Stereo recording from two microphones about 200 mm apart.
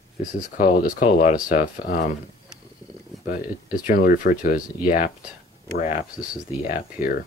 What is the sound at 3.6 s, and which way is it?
Speech, 45° left (ahead or behind).